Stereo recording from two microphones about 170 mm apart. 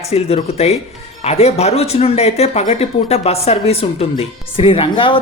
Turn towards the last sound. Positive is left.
turn(degrees=30)  # may be behind; listen again after turning